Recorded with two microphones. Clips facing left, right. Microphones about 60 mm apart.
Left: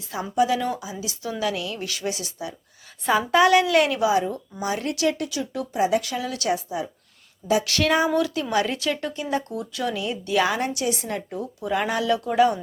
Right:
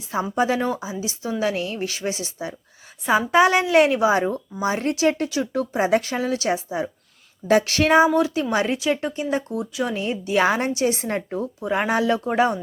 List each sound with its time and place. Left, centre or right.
0.1 s a woman's voice: right
4.1 s a woman's voice: right